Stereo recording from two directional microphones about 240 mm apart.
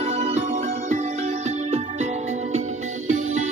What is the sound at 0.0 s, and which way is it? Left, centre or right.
Music, right.